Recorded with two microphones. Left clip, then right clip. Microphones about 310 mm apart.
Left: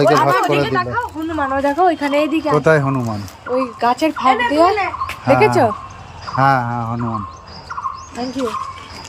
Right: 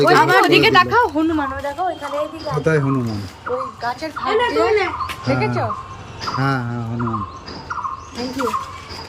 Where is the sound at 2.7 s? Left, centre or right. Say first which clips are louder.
Left 3 dB; centre.